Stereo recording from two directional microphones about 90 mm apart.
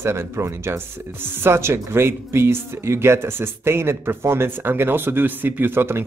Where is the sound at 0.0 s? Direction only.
30° right (ahead or behind).